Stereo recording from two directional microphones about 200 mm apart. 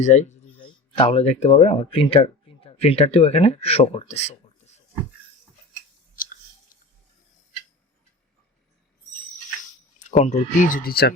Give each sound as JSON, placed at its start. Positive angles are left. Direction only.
{"t": 0.0, "sound": "speech", "side_deg": 35}
{"t": 9.6, "sound": "speech", "side_deg": 40}